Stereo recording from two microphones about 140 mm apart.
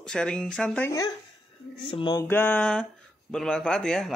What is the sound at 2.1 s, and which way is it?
Speech, 15° left (ahead or behind).